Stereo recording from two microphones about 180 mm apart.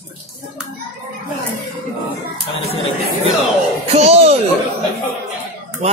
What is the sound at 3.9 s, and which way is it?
Speech, 35° right (ahead or behind).